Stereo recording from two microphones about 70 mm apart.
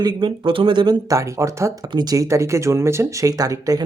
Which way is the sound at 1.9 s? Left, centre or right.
Right.